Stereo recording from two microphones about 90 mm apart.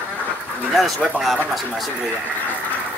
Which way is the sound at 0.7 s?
Centre (ahead or behind).